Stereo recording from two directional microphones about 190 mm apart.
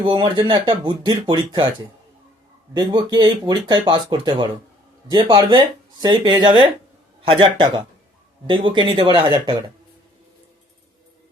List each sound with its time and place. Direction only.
0.0 s speech: 25° right (ahead or behind)
2.7 s speech: 20° right (ahead or behind)